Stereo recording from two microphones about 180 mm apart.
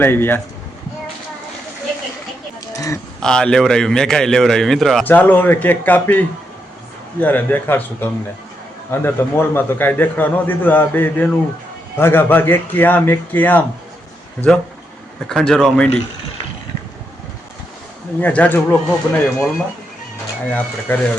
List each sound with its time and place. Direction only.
0.0 s a man's voice: 10° left (ahead or behind)
2.7 s speech: 20° left (ahead or behind)
3.2 s a man's voice: 5° left (ahead or behind)
15.3 s speech: centre (ahead or behind)
18.2 s a man's voice: 10° left (ahead or behind)
20.5 s a man's voice: 10° left (ahead or behind)